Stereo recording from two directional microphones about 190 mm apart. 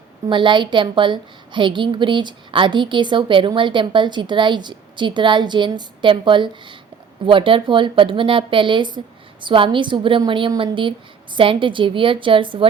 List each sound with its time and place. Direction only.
0.3 s a woman's voice: 25° right (ahead or behind)